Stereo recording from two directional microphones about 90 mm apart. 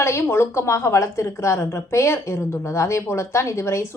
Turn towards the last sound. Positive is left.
turn(degrees=30)  # may be behind; listen again after turning